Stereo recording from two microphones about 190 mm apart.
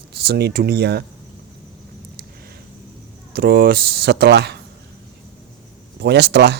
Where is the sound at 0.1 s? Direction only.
60° right (ahead or behind).